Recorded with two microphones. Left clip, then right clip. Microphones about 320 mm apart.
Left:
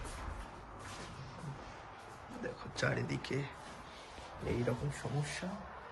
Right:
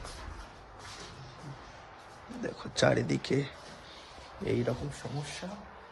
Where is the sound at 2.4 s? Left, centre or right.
Centre.